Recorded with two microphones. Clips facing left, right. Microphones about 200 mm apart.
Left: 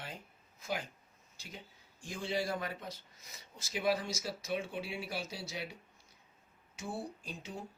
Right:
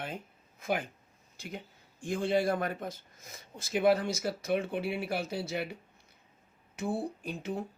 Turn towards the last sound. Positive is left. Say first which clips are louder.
# right 9 dB
turn(degrees=-60)  # may be behind; listen again after turning